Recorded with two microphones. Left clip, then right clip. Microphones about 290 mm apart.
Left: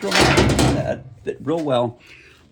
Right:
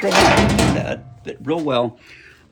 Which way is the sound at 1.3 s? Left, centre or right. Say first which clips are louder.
Even; centre.